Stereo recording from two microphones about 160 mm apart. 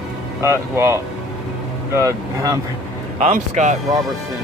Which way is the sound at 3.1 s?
50° right (ahead or behind).